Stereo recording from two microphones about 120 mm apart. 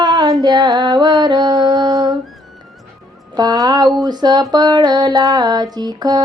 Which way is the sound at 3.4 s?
30° right (ahead or behind).